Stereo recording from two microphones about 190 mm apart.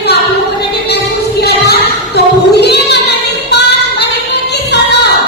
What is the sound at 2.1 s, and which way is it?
Female singing, 60° left (ahead or behind).